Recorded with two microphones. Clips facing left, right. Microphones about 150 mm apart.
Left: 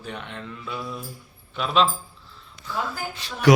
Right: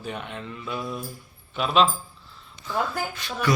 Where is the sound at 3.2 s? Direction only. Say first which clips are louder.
Right 3 dB; 35° left (ahead or behind).